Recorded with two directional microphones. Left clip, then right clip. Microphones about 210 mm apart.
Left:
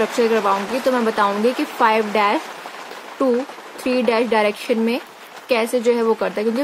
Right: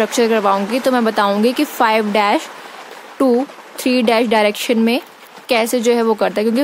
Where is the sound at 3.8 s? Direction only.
50° right (ahead or behind).